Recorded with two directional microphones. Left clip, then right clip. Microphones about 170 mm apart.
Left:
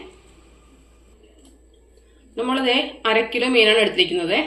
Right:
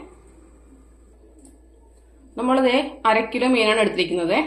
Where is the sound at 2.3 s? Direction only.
65° right (ahead or behind).